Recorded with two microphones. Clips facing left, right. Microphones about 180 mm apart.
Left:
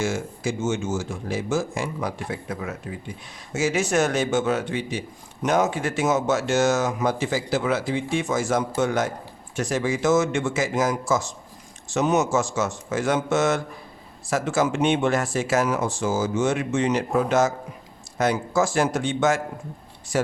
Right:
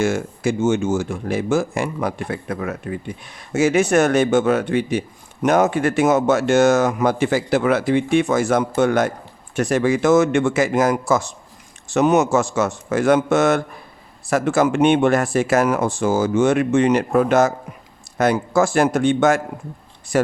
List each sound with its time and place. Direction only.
0.0 s speech: 60° right (ahead or behind)